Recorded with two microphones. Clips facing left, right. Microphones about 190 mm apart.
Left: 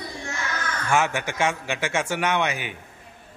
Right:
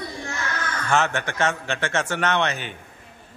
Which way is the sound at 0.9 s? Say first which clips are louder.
Even; 10° left (ahead or behind).